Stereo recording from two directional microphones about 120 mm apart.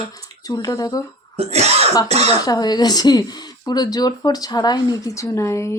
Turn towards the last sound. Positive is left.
turn(degrees=25)  # may be behind; listen again after turning